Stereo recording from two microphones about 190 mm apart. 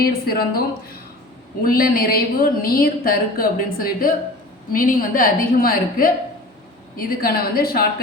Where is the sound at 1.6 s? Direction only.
50° left (ahead or behind).